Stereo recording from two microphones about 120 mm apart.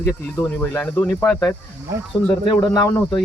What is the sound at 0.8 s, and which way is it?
Speech, 10° left (ahead or behind).